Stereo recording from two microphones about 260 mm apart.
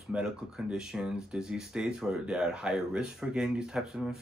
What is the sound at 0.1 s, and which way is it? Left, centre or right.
Speech, centre.